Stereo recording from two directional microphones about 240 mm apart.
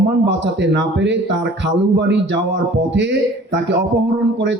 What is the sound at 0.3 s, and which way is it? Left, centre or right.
A man's voice, right.